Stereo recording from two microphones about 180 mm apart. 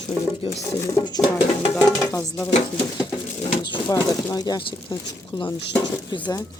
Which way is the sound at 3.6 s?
20° left (ahead or behind).